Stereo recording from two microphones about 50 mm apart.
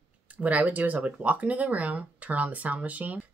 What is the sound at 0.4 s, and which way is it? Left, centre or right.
Speech, right.